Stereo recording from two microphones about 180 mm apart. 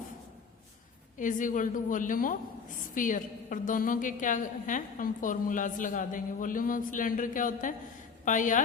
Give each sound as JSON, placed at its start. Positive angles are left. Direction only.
{"t": 1.2, "sound": "a woman's voice", "side_deg": 45}